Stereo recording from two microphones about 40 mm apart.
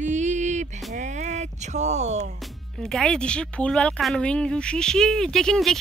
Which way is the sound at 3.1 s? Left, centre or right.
Left.